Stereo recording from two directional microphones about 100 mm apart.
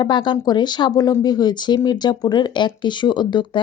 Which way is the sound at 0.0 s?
50° left (ahead or behind).